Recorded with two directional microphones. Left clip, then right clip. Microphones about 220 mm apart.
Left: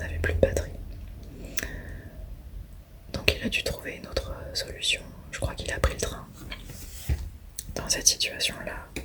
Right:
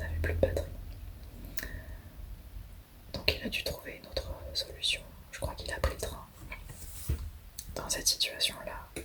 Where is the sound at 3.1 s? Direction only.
15° left (ahead or behind).